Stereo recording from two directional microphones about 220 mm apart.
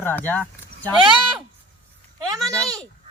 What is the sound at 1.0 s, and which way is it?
Speech, 20° right (ahead or behind).